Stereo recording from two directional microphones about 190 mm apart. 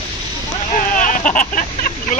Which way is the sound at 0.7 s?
45° left (ahead or behind).